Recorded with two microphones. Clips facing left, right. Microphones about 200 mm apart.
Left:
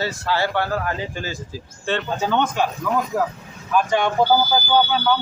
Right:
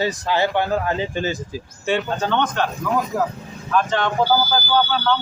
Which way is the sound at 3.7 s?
10° left (ahead or behind).